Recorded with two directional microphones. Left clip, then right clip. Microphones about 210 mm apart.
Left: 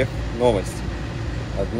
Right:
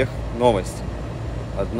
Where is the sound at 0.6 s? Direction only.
30° right (ahead or behind).